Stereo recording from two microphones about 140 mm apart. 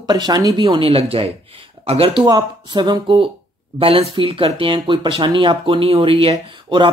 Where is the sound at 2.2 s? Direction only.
30° right (ahead or behind).